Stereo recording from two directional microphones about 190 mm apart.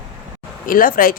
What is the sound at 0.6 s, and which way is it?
Speech, 45° left (ahead or behind).